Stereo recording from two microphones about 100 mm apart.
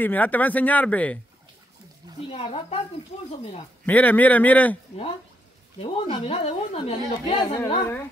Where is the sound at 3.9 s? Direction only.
15° left (ahead or behind).